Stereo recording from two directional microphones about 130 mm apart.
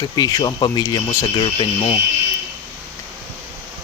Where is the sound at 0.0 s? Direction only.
30° left (ahead or behind).